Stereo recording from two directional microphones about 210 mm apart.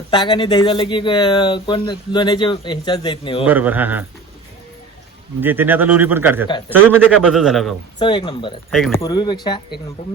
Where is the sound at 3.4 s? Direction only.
10° right (ahead or behind).